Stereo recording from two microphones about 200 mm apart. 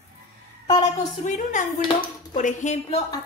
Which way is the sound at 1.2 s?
35° left (ahead or behind).